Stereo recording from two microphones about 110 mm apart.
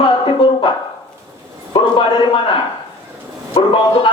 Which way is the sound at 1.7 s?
50° left (ahead or behind).